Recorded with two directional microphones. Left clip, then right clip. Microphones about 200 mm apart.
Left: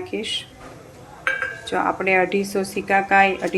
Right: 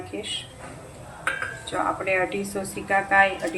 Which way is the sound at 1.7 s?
50° left (ahead or behind).